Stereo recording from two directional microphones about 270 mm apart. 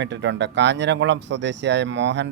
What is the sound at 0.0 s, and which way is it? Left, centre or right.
Speech, right.